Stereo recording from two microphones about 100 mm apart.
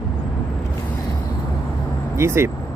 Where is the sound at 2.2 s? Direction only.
25° right (ahead or behind).